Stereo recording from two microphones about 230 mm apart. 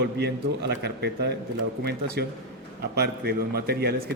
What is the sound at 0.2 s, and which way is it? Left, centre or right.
Speech, right.